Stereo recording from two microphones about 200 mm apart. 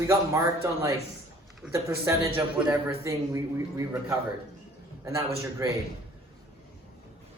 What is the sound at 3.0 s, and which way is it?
A man's voice, 15° right (ahead or behind).